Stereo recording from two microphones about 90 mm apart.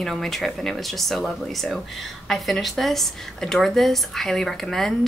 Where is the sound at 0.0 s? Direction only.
5° left (ahead or behind).